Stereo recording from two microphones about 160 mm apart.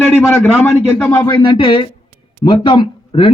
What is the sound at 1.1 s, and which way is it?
Speech, 25° left (ahead or behind).